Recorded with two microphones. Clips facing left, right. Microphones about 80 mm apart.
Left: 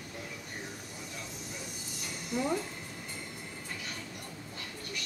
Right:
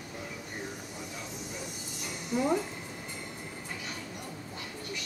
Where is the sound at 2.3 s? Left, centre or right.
Centre.